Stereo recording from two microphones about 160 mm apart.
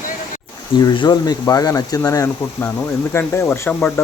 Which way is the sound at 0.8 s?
25° left (ahead or behind).